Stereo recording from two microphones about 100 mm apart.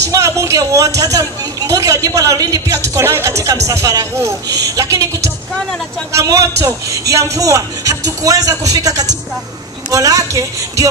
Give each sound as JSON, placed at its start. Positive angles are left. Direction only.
{"t": 0.1, "sound": "speech", "side_deg": -30}